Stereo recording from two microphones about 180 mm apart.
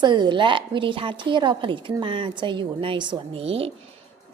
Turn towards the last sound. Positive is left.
turn(degrees=-35)  # may be behind; listen again after turning